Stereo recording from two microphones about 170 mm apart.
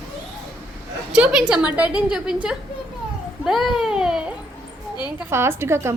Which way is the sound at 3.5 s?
Centre (ahead or behind).